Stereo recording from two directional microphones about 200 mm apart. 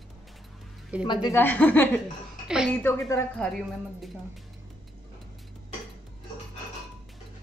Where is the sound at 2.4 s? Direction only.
5° right (ahead or behind).